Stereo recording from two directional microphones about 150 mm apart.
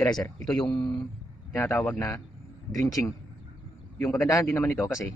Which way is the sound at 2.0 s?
20° left (ahead or behind).